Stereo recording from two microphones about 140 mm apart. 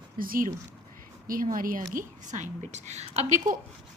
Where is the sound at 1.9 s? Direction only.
60° right (ahead or behind).